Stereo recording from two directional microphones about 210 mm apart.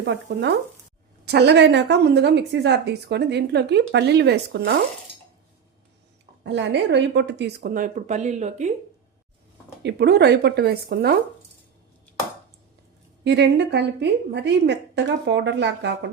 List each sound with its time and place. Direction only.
0.1 s a woman's voice: 55° right (ahead or behind)
6.4 s a woman's voice: 55° right (ahead or behind); by 8.7 s 35° right (ahead or behind)
9.8 s a woman's voice: 50° right (ahead or behind)
13.2 s a woman's voice: 55° right (ahead or behind)